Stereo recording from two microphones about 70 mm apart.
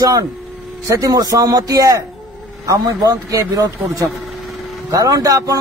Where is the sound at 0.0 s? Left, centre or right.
Right.